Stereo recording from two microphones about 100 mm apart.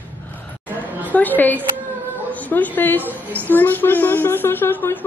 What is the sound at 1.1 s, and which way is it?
A woman's voice, 15° left (ahead or behind).